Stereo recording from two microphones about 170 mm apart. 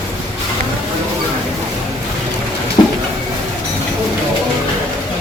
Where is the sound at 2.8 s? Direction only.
25° left (ahead or behind).